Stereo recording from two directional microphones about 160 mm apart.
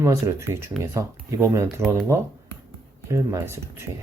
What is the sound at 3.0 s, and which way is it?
Speech, 20° right (ahead or behind).